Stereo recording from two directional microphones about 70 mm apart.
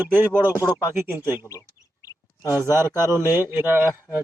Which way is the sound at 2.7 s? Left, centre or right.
Right.